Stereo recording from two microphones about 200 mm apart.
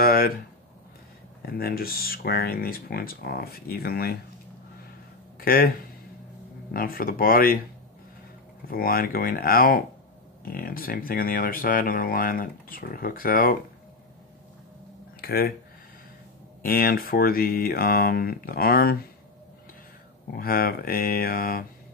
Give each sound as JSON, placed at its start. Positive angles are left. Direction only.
{"t": 0.0, "sound": "a sound", "side_deg": 45}
{"t": 1.4, "sound": "speech", "side_deg": 50}
{"t": 5.4, "sound": "speech", "side_deg": 45}
{"t": 6.7, "sound": "speech", "side_deg": 45}
{"t": 8.6, "sound": "speech", "side_deg": 45}
{"t": 15.1, "sound": "speech", "side_deg": 50}
{"t": 16.6, "sound": "speech", "side_deg": 50}
{"t": 20.3, "sound": "speech", "side_deg": 45}